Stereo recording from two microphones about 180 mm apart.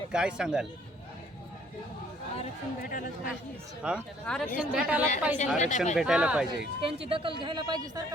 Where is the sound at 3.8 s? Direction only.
5° right (ahead or behind).